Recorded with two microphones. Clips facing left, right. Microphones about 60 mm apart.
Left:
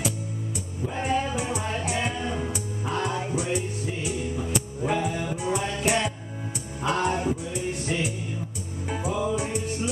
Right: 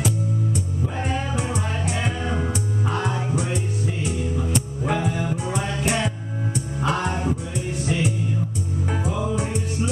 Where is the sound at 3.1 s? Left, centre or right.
Centre.